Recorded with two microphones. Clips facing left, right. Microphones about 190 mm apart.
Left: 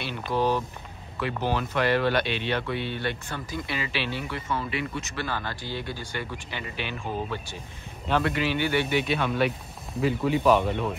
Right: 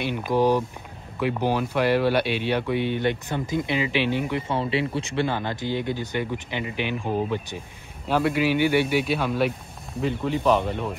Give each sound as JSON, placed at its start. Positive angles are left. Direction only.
{"t": 0.0, "sound": "speech", "side_deg": -15}
{"t": 4.5, "sound": "speech", "side_deg": -30}
{"t": 8.1, "sound": "speech", "side_deg": -5}